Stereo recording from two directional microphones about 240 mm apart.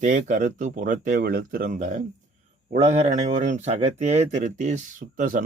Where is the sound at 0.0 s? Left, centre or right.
Right.